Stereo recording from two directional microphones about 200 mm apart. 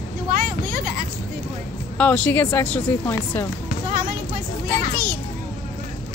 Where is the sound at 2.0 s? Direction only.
5° left (ahead or behind).